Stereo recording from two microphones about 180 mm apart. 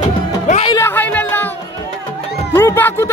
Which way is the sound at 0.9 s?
10° left (ahead or behind).